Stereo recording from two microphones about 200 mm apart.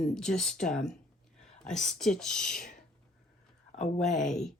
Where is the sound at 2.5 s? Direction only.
45° left (ahead or behind).